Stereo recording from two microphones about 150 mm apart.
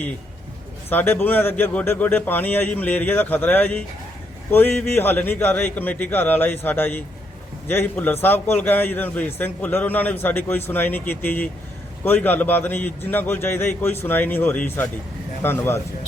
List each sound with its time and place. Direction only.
0.9 s a man's voice: 15° left (ahead or behind)